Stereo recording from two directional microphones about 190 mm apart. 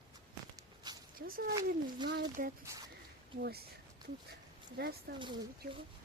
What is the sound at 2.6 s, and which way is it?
Speech, 15° right (ahead or behind).